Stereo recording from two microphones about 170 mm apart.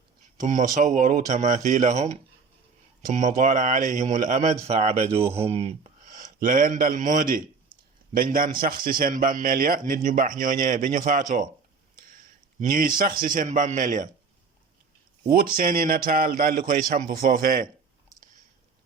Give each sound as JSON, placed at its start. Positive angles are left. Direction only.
{"t": 0.3, "sound": "a man's voice", "side_deg": -45}
{"t": 12.5, "sound": "speech", "side_deg": -55}
{"t": 15.3, "sound": "a man's voice", "side_deg": -60}